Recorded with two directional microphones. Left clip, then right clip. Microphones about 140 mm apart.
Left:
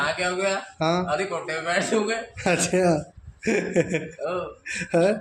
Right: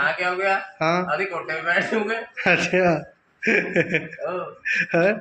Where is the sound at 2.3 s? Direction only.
20° left (ahead or behind).